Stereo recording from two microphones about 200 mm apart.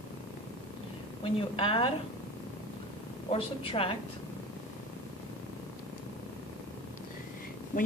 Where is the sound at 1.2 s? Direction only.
25° left (ahead or behind).